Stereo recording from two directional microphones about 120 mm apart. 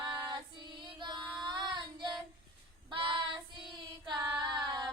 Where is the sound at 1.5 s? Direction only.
40° right (ahead or behind).